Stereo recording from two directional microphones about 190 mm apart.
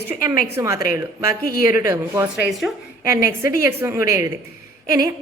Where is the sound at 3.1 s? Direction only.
15° right (ahead or behind).